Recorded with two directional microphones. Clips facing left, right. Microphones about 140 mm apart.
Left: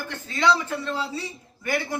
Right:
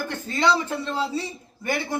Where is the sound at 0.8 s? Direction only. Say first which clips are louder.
Right 3 dB; 25° right (ahead or behind).